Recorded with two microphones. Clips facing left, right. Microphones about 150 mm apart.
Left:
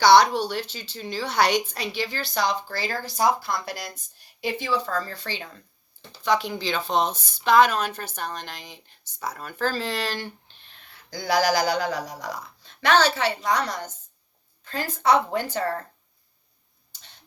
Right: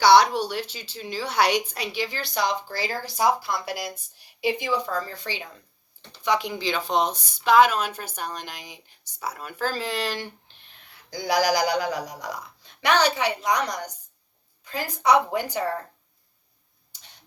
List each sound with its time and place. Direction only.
0.0 s speech: 10° right (ahead or behind)